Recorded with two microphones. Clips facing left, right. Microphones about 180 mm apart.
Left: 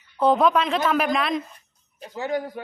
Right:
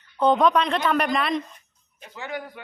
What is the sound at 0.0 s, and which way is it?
A woman's voice, 5° left (ahead or behind).